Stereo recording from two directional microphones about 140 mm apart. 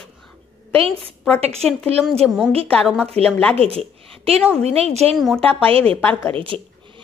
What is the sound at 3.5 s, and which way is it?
A woman's voice, 45° right (ahead or behind).